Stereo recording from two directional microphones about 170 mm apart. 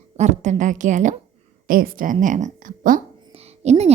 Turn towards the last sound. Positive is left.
turn(degrees=-40)  # may be behind; listen again after turning